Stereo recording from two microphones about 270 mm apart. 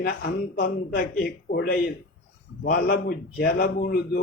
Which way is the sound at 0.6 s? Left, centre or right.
Left.